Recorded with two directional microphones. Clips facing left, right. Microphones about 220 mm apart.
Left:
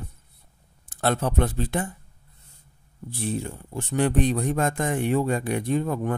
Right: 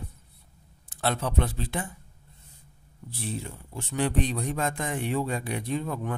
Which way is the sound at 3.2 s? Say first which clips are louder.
Left 6 dB; 50° left (ahead or behind).